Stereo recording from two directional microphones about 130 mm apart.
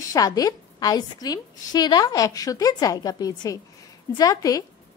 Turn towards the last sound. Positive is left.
turn(degrees=25)  # may be behind; listen again after turning